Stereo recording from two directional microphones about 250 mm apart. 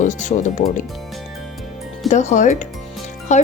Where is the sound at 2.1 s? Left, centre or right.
Left.